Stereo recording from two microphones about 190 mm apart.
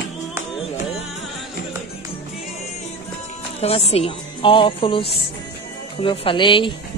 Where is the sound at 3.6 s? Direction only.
30° left (ahead or behind).